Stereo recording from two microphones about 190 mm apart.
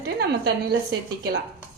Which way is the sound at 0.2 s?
60° right (ahead or behind).